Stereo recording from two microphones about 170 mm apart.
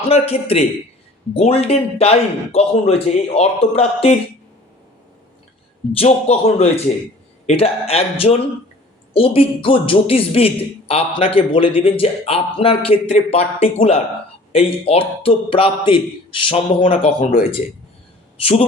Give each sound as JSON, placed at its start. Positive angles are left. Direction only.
{"t": 0.1, "sound": "a man's voice", "side_deg": 35}
{"t": 6.1, "sound": "a man's voice", "side_deg": 40}